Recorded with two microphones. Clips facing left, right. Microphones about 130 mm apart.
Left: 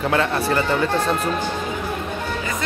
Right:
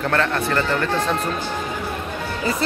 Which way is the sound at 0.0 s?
10° left (ahead or behind).